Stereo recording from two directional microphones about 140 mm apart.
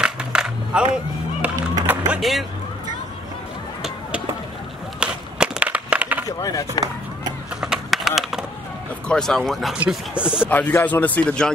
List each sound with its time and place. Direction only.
0.0 s coin: 5° right (ahead or behind)
1.9 s music: 5° right (ahead or behind)
5.0 s a sound: 10° right (ahead or behind)
6.2 s speech: 25° left (ahead or behind)
7.6 s a sound: 5° right (ahead or behind)
9.0 s speech: 5° left (ahead or behind)
10.5 s speech: 15° left (ahead or behind)